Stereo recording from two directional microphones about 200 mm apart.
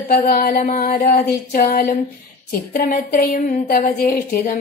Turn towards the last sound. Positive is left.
turn(degrees=45)  # may be behind; listen again after turning